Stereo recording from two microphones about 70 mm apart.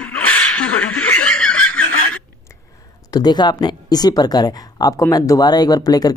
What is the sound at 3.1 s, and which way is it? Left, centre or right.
Speech, left.